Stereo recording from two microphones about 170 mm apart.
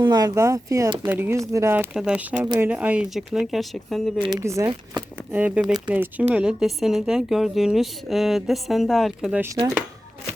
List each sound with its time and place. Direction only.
0.0 s speech: 25° right (ahead or behind)
1.9 s a woman's voice: 5° right (ahead or behind)
4.2 s a woman's voice: 20° right (ahead or behind); by 9.4 s centre (ahead or behind)